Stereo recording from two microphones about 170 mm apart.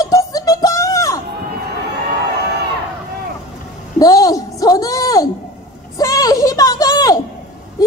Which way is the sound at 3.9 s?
20° left (ahead or behind).